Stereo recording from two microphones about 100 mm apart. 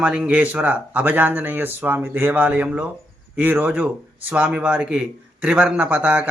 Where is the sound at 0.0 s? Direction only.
10° right (ahead or behind).